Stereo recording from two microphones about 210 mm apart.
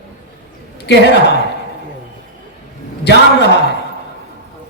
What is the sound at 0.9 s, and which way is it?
Speech, 55° left (ahead or behind).